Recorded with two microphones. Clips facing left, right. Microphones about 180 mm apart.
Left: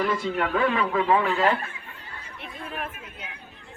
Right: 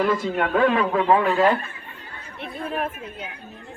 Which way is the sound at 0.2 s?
45° right (ahead or behind).